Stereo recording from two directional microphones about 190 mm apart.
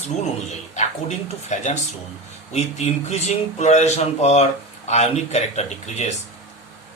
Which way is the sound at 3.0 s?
35° left (ahead or behind).